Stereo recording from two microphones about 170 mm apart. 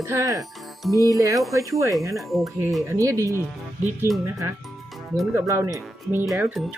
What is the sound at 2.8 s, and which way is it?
Speech, 20° right (ahead or behind).